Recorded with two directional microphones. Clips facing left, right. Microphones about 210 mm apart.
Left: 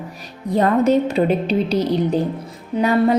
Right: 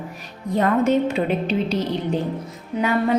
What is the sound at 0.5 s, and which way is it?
A woman's voice, 35° left (ahead or behind).